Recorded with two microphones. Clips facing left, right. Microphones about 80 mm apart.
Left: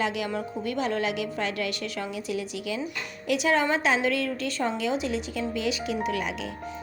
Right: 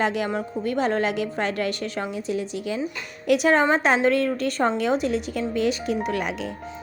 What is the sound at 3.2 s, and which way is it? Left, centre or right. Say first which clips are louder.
A woman's voice: right 5 dB; right.